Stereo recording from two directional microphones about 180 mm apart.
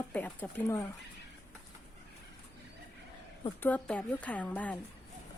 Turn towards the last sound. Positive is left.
turn(degrees=10)  # may be behind; listen again after turning